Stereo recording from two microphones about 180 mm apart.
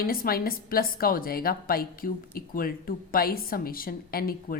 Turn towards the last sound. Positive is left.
turn(degrees=55)  # may be behind; listen again after turning